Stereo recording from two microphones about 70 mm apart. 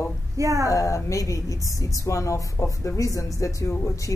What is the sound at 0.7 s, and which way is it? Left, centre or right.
A woman's voice, left.